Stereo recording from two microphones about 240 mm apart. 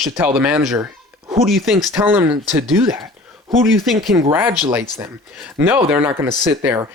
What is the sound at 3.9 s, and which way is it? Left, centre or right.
Speech, centre.